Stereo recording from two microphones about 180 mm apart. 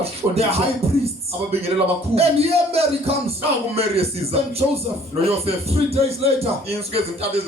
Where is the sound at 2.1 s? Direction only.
35° right (ahead or behind).